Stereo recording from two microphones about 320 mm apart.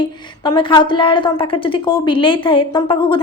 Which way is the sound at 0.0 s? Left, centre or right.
Centre.